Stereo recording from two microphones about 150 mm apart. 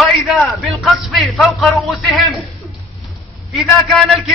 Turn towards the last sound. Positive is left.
turn(degrees=0)  # may be behind; listen again after turning